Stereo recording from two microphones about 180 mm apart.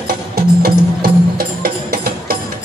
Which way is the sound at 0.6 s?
55° right (ahead or behind).